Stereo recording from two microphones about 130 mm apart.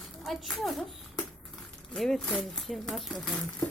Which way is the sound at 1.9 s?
Centre (ahead or behind).